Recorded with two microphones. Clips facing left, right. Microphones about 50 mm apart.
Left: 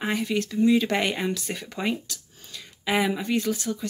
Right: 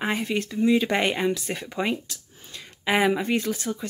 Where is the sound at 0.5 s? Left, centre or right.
Centre.